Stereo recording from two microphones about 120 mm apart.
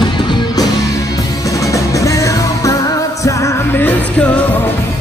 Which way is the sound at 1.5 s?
25° left (ahead or behind).